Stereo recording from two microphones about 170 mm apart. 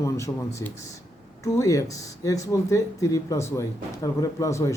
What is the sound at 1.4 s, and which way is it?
Speech, 20° left (ahead or behind).